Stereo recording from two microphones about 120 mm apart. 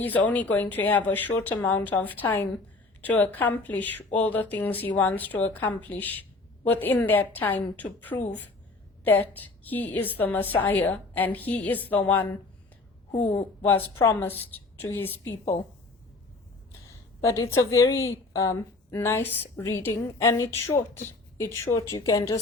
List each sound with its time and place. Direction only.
0.0 s a woman's voice: 15° left (ahead or behind)
13.6 s a woman's voice: 15° left (ahead or behind)
17.2 s a woman's voice: 25° left (ahead or behind)